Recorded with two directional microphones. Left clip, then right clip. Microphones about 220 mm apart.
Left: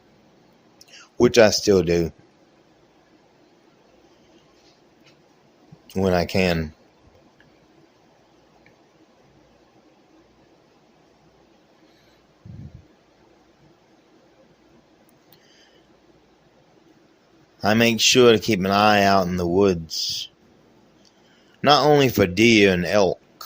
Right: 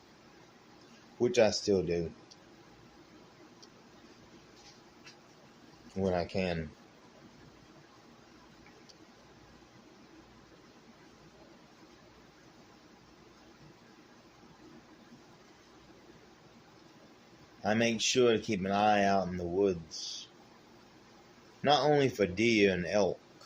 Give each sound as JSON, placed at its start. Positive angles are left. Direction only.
{"t": 1.2, "sound": "speech", "side_deg": 55}
{"t": 5.9, "sound": "speech", "side_deg": 55}
{"t": 17.6, "sound": "speech", "side_deg": 55}
{"t": 21.6, "sound": "speech", "side_deg": 55}